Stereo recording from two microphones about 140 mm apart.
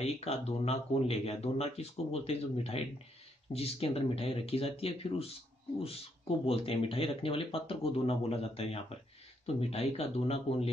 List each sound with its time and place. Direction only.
0.0 s speech: 50° left (ahead or behind)